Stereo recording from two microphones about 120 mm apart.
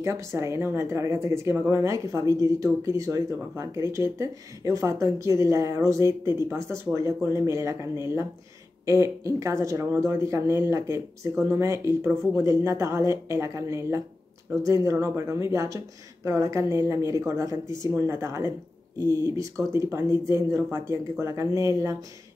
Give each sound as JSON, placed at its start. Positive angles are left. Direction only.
{"t": 0.0, "sound": "speech", "side_deg": -25}